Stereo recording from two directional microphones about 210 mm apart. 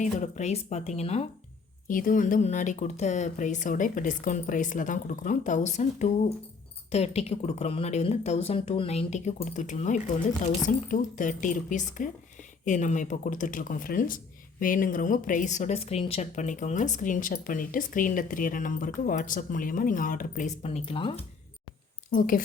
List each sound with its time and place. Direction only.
0.0 s a woman's voice: 35° left (ahead or behind)
22.1 s a woman's voice: 40° left (ahead or behind)